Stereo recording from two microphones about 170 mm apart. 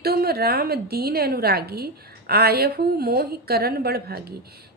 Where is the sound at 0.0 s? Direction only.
65° right (ahead or behind).